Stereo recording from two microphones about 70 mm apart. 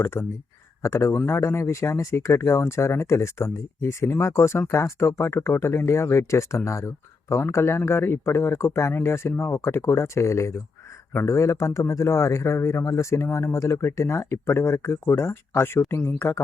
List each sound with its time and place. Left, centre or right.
0.0 s speech: left
11.3 s speech: left